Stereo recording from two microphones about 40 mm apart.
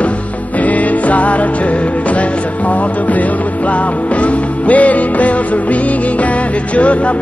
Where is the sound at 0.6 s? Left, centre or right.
Left.